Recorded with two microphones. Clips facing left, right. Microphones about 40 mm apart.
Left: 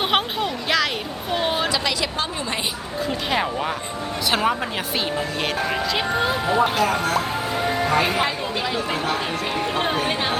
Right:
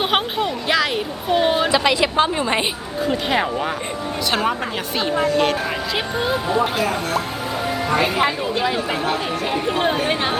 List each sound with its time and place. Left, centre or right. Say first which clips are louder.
0.0 s a sound: right 2 dB; centre
1.7 s a woman's voice: right 7 dB; right
3.0 s speech: right 3 dB; centre
6.1 s speech: right 2 dB; centre
8.0 s speech: right 3 dB; centre